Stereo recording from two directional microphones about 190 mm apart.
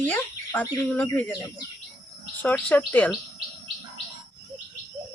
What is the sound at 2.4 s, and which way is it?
Speech, 10° left (ahead or behind).